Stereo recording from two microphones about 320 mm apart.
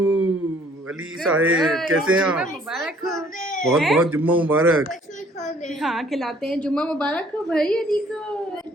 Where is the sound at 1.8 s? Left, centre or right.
Right.